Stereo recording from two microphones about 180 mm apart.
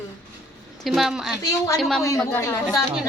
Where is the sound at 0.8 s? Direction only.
Centre (ahead or behind).